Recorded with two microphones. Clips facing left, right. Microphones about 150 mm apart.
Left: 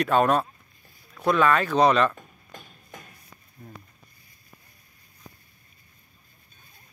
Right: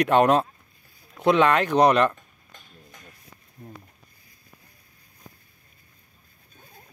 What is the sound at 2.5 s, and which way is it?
Music, 50° left (ahead or behind).